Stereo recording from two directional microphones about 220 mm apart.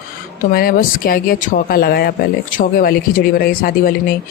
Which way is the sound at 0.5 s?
40° left (ahead or behind).